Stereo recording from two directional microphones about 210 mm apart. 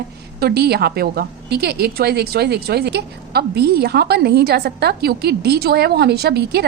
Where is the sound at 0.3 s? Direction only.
50° right (ahead or behind).